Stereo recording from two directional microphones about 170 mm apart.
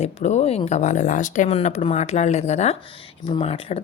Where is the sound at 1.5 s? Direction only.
35° left (ahead or behind).